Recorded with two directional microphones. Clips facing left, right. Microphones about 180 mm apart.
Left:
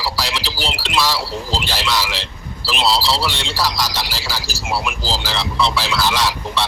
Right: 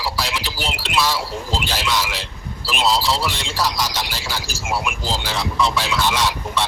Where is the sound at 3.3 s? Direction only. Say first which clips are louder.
Left 1 dB; centre (ahead or behind).